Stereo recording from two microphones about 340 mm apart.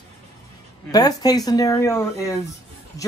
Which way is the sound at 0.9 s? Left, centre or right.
Centre.